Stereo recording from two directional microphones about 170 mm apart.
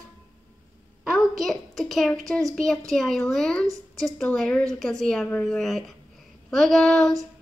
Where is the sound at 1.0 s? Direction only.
Centre (ahead or behind).